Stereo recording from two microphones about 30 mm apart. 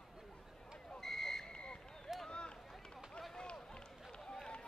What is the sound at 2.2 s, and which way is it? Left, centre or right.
Run, left.